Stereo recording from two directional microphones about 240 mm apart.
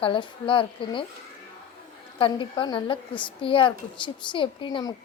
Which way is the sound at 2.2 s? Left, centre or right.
Left.